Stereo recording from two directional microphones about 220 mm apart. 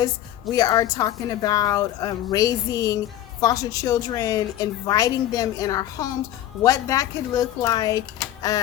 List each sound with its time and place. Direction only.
0.5 s a woman's voice: 15° left (ahead or behind)